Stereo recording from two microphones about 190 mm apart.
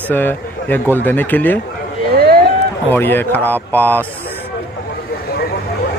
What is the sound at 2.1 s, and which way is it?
Boat, 55° right (ahead or behind).